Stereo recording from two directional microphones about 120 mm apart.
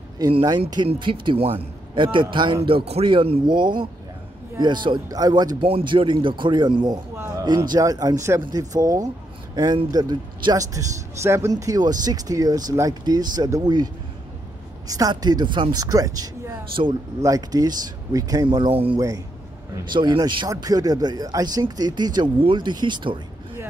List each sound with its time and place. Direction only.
0.3 s a man's voice: 45° right (ahead or behind)
5.6 s a man's voice: 50° right (ahead or behind)
7.2 s a sound: 25° right (ahead or behind)
7.4 s speech: 35° right (ahead or behind)
14.9 s speech: 30° right (ahead or behind)
16.8 s a man's voice: 50° right (ahead or behind)
17.2 s speech: 30° right (ahead or behind)
18.7 s a man's voice: 50° right (ahead or behind)
18.9 s a man's voice: 30° right (ahead or behind)
19.8 s speech: 40° right (ahead or behind)